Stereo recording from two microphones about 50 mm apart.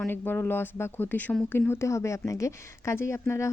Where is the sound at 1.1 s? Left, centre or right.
Left.